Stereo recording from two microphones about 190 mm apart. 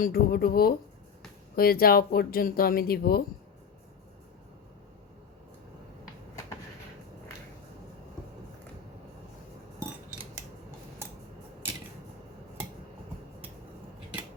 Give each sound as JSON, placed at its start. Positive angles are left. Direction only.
{"t": 0.0, "sound": "speech", "side_deg": 50}